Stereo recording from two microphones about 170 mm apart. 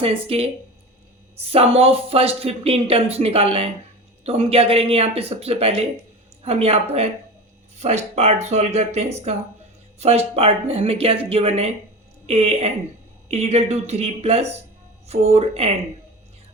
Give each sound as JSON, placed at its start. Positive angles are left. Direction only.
{"t": 0.0, "sound": "speech", "side_deg": -35}